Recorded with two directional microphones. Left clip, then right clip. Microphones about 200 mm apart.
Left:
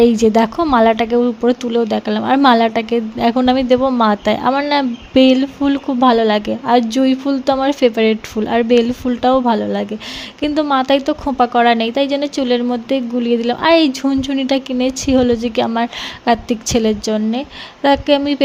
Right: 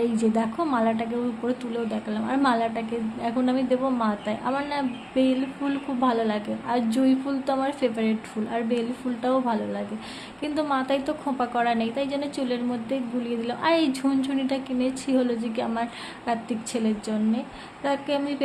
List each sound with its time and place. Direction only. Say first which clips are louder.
0.0 s a woman's voice: left 13 dB; 45° left (ahead or behind)